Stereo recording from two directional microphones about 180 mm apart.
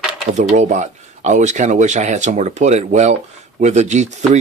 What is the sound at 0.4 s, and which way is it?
Speech, 40° right (ahead or behind).